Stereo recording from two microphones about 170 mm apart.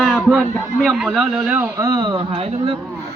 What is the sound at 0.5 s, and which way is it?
Speech, centre (ahead or behind).